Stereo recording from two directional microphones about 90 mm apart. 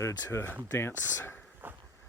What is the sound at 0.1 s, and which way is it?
Speech, 45° left (ahead or behind).